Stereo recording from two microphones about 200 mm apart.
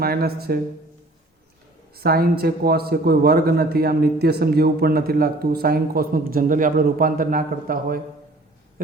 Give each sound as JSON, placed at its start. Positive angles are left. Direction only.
{"t": 0.0, "sound": "a man's voice", "side_deg": -50}
{"t": 2.0, "sound": "a man's voice", "side_deg": -50}